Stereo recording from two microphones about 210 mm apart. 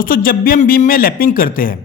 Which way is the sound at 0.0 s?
40° left (ahead or behind).